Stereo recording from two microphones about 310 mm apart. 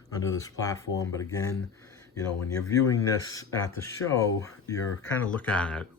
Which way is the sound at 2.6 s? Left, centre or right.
Centre.